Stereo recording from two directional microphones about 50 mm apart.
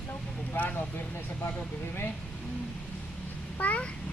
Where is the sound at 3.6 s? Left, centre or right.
Left.